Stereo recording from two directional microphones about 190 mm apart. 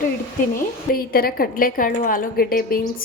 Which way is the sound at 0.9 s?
50° left (ahead or behind).